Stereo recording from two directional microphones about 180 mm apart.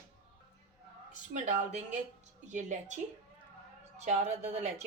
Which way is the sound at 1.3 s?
45° right (ahead or behind).